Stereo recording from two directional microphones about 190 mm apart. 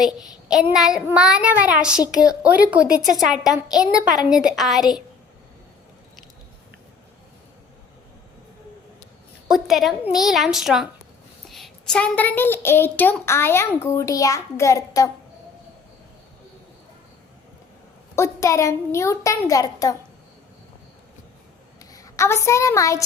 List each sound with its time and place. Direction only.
0.0 s a child's voice: 5° right (ahead or behind)
9.5 s a woman's voice: centre (ahead or behind); by 15.1 s 15° left (ahead or behind)
18.2 s a woman's voice: 15° left (ahead or behind)
21.8 s a child's voice: 20° left (ahead or behind)